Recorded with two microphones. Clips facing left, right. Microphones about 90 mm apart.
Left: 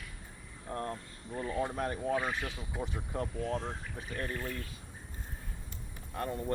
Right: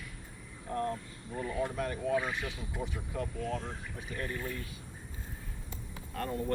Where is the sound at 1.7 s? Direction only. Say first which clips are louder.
Even; 35° left (ahead or behind).